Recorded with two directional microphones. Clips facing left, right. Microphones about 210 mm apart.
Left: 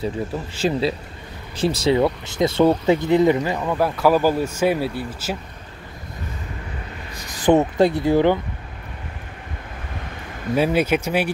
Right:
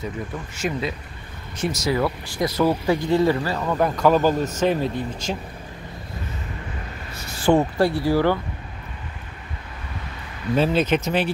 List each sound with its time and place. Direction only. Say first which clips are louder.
0.6 s a man's voice: left 5 dB; 30° left (ahead or behind); by 3.7 s 15° left (ahead or behind)
3.7 s speech: even; 5° left (ahead or behind)
7.2 s speech: left 2 dB; 15° left (ahead or behind)
10.5 s speech: left 1 dB; 10° left (ahead or behind)